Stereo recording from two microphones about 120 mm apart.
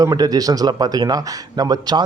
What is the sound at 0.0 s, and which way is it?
A man's voice, 30° right (ahead or behind).